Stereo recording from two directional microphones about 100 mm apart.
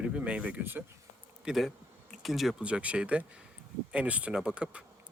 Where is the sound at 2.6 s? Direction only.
10° right (ahead or behind).